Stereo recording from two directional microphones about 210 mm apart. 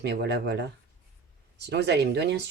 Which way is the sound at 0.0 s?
50° right (ahead or behind).